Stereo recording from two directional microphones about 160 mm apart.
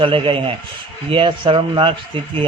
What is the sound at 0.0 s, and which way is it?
A man's voice, 35° right (ahead or behind).